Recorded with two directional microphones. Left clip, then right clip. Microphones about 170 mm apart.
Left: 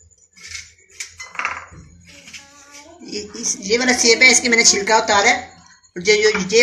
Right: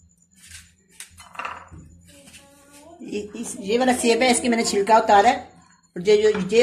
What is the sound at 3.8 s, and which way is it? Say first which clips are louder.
Speech: left 7 dB; 55° right (ahead or behind).